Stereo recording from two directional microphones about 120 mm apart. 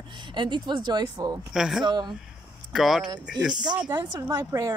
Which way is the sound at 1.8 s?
35° right (ahead or behind).